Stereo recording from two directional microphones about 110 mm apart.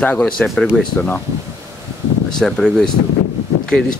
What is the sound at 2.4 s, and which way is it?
Speech, 5° left (ahead or behind).